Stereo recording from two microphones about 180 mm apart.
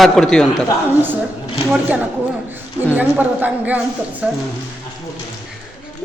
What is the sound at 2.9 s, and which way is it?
Speech, 10° right (ahead or behind).